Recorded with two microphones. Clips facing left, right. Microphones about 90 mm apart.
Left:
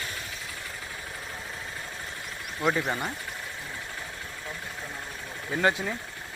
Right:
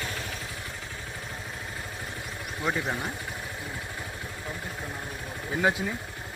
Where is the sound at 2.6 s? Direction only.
Centre (ahead or behind).